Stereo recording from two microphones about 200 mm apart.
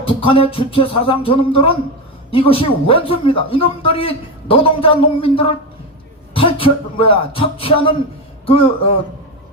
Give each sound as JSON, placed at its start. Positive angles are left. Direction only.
{"t": 0.3, "sound": "a man's voice", "side_deg": 25}